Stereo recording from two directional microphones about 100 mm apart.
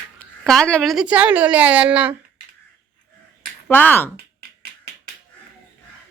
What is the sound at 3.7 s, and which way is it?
Speech, 20° left (ahead or behind).